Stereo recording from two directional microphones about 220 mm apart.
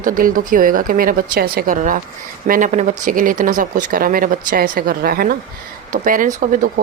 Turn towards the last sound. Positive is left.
turn(degrees=-40)  # may be behind; listen again after turning